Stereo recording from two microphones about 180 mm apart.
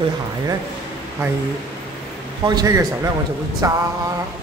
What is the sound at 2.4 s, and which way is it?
Speech, 20° right (ahead or behind).